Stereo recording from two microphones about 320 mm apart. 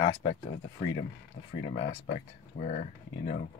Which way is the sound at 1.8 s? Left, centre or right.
Left.